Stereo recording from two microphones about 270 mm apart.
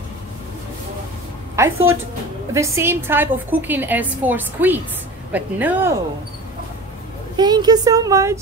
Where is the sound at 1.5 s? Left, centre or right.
Centre.